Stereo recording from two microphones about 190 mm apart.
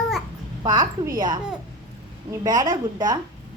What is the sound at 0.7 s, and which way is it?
Speech, 25° right (ahead or behind).